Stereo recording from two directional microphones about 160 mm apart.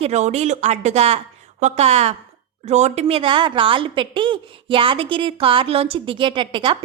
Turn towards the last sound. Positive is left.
turn(degrees=-30)  # may be behind; listen again after turning